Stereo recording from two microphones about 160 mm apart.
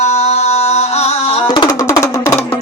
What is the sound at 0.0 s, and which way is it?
Music, 45° left (ahead or behind).